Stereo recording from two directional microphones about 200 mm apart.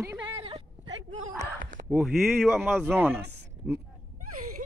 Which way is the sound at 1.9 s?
Centre (ahead or behind).